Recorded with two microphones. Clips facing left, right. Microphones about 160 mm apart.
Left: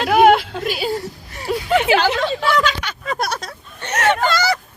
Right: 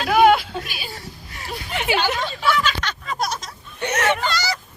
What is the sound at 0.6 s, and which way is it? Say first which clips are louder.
Speech: left 13 dB; 90° left.